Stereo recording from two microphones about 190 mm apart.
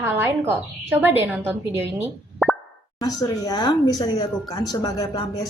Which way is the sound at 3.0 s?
20° left (ahead or behind).